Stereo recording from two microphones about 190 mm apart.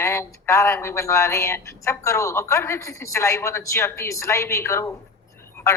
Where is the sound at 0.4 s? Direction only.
15° left (ahead or behind).